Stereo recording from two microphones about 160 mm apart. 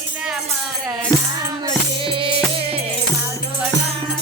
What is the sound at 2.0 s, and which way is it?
Music, 35° right (ahead or behind).